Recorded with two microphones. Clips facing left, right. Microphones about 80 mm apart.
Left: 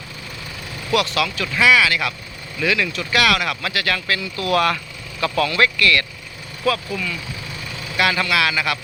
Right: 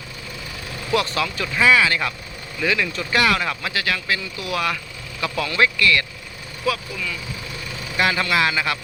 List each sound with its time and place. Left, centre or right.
0.9 s speech: right
2.6 s speech: centre
5.2 s speech: centre
6.7 s speech: centre
7.9 s speech: right